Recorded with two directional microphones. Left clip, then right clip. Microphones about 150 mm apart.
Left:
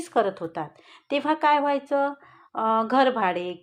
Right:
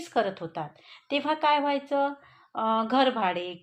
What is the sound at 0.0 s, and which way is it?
A woman's voice, 20° left (ahead or behind).